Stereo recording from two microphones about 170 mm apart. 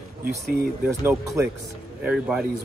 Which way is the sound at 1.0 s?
20° right (ahead or behind).